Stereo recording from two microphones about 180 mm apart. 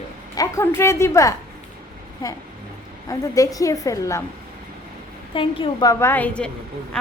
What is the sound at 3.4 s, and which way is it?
Speech, 20° left (ahead or behind).